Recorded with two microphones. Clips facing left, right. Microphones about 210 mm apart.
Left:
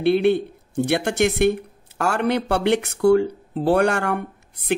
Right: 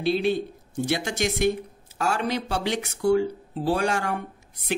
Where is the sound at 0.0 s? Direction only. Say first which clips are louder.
Left 6 dB; 60° left (ahead or behind).